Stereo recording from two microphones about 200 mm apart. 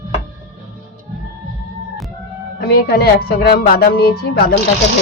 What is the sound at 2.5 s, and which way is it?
A woman's voice, 50° left (ahead or behind).